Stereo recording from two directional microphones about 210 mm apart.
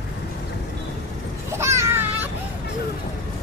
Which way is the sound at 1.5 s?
15° right (ahead or behind).